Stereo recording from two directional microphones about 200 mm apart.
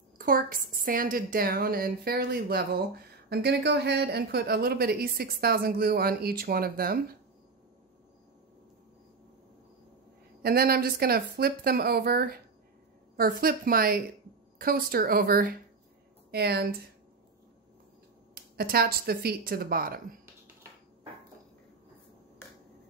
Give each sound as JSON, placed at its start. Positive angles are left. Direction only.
{"t": 0.2, "sound": "a woman's voice", "side_deg": -45}
{"t": 10.4, "sound": "a woman's voice", "side_deg": -50}
{"t": 18.3, "sound": "a woman's voice", "side_deg": -50}